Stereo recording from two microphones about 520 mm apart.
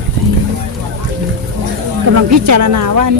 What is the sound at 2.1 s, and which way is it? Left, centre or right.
Speech, right.